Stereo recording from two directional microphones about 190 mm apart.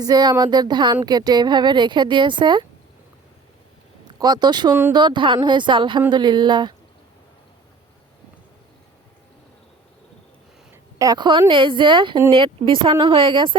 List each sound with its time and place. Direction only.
0.0 s speech: 20° right (ahead or behind)
4.2 s speech: 20° right (ahead or behind)
10.9 s speech: 20° right (ahead or behind)